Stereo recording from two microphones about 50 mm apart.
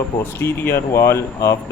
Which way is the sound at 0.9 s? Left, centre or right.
Left.